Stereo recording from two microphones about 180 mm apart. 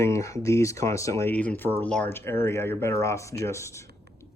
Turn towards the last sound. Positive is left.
turn(degrees=15)  # may be behind; listen again after turning